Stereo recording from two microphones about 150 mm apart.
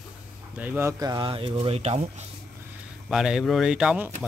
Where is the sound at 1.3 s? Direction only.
35° right (ahead or behind).